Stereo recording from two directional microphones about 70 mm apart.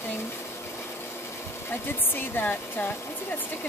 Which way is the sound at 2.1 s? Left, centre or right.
Left.